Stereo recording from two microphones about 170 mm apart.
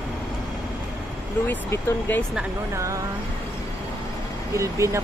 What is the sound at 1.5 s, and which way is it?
Speech, 15° left (ahead or behind).